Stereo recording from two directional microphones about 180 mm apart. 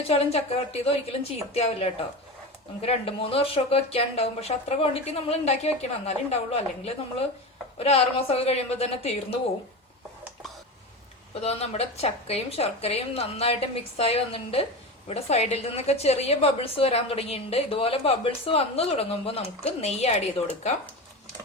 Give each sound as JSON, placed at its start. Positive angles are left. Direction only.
{"t": 0.0, "sound": "a woman's voice", "side_deg": 35}
{"t": 11.3, "sound": "a woman's voice", "side_deg": 35}